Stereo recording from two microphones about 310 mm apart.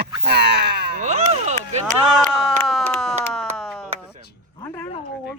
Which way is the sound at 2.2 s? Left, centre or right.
Centre.